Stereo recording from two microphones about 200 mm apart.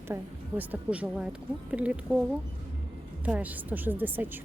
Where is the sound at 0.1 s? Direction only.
10° right (ahead or behind).